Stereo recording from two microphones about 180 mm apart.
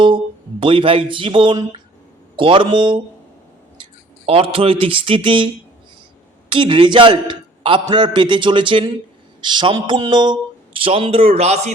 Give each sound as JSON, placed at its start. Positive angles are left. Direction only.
{"t": 0.6, "sound": "a man's voice", "side_deg": -30}
{"t": 4.3, "sound": "a man's voice", "side_deg": -30}
{"t": 6.5, "sound": "a man's voice", "side_deg": -30}